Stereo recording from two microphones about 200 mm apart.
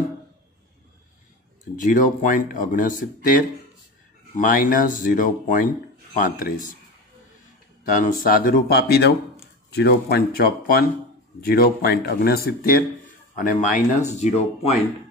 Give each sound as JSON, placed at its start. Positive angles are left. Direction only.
{"t": 1.8, "sound": "speech", "side_deg": 40}
{"t": 4.4, "sound": "speech", "side_deg": 45}
{"t": 7.8, "sound": "speech", "side_deg": 40}